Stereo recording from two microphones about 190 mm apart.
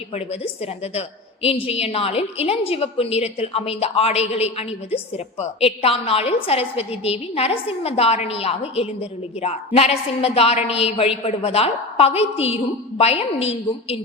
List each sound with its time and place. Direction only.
0.1 s a woman's voice: 35° left (ahead or behind)